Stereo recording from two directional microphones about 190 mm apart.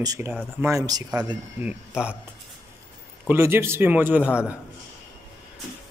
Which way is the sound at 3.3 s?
15° right (ahead or behind).